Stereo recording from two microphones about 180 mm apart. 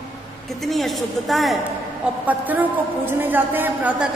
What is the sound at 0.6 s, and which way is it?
A woman's voice, centre (ahead or behind).